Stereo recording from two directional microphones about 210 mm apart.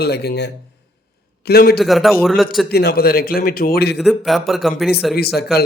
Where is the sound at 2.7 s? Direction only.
50° left (ahead or behind).